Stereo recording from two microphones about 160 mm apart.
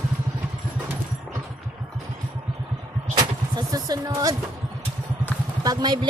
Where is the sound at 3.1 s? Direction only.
25° right (ahead or behind).